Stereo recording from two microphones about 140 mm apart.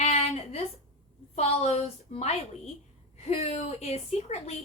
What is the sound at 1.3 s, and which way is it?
A woman's voice, 50° left (ahead or behind).